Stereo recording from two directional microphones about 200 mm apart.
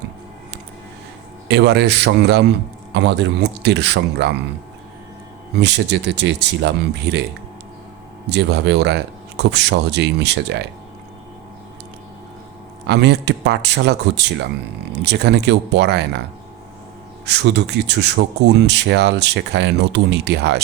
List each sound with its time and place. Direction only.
1.5 s speech: 55° right (ahead or behind)
5.5 s speech: 60° right (ahead or behind)
8.3 s speech: 55° right (ahead or behind)
12.9 s speech: 60° right (ahead or behind)
17.2 s speech: 60° right (ahead or behind)